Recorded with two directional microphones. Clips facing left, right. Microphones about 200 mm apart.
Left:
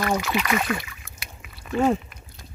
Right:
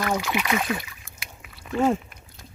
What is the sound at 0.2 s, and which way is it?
Speech, 15° right (ahead or behind).